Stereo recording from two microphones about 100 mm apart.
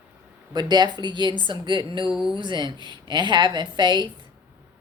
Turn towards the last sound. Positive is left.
turn(degrees=-50)  # may be behind; listen again after turning